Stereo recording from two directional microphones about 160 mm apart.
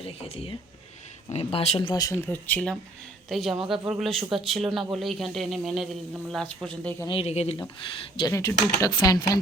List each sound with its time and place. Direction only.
0.0 s speech: 40° left (ahead or behind)
1.9 s a man's voice: 20° left (ahead or behind); by 6.9 s 5° left (ahead or behind)
7.1 s speech: 40° left (ahead or behind)
8.3 s speech: 20° left (ahead or behind)